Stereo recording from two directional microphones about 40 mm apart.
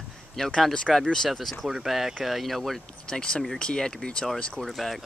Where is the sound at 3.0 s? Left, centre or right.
Left.